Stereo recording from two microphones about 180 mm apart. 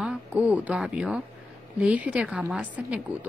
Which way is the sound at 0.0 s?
5° right (ahead or behind).